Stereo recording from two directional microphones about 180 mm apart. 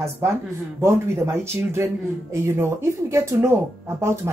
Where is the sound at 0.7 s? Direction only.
15° right (ahead or behind).